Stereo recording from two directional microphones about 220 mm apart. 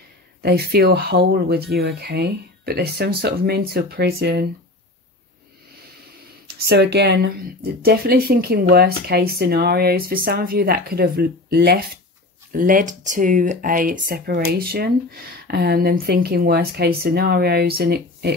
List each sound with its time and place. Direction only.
0.4 s speech: 45° right (ahead or behind)
6.6 s speech: 50° right (ahead or behind)